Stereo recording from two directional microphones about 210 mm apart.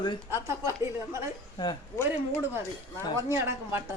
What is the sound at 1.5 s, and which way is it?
Speech, 20° left (ahead or behind).